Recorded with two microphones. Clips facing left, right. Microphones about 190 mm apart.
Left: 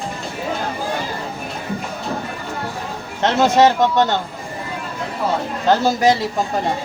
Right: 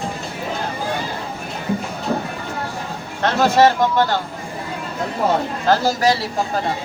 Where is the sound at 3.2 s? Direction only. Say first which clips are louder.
Left 1 dB; 20° left (ahead or behind).